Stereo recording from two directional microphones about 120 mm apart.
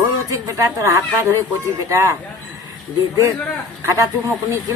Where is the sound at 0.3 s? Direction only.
30° right (ahead or behind).